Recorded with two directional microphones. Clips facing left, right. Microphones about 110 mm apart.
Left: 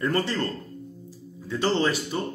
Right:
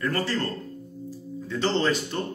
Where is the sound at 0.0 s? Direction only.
20° left (ahead or behind).